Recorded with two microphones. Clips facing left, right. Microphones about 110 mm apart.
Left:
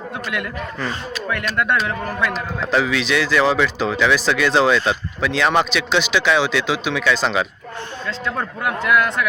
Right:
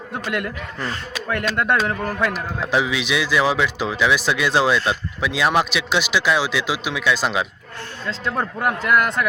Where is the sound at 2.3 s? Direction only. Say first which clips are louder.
Left 1 dB; 10° right (ahead or behind).